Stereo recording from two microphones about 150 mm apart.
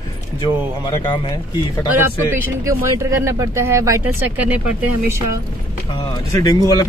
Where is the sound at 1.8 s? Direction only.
15° right (ahead or behind).